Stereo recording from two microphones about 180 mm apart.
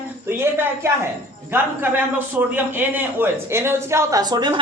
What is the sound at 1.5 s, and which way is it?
A woman's voice, 10° right (ahead or behind).